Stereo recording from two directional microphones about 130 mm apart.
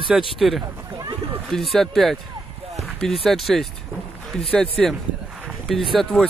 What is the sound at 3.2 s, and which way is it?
Speech, centre (ahead or behind).